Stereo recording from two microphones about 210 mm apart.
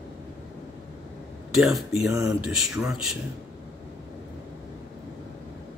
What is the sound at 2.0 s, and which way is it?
Speech, 15° right (ahead or behind).